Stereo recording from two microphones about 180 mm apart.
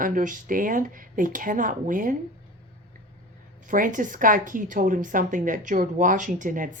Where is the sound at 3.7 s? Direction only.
45° right (ahead or behind).